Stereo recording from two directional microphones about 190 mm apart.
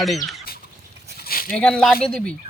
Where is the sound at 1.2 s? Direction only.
50° left (ahead or behind).